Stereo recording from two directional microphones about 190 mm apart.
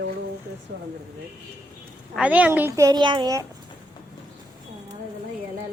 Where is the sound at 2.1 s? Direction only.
5° right (ahead or behind).